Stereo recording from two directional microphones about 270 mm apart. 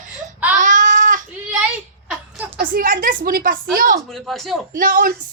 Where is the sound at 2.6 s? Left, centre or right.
Right.